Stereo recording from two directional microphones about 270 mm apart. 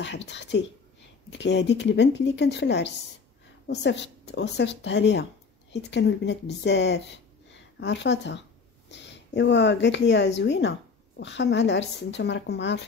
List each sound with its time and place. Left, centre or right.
0.0 s speech: left